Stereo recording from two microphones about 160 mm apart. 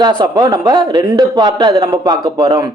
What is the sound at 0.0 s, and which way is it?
Speech, 30° right (ahead or behind).